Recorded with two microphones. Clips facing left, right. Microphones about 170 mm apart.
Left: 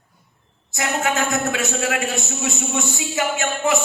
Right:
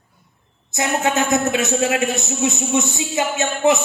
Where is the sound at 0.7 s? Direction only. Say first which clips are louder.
Right 3 dB; 20° right (ahead or behind).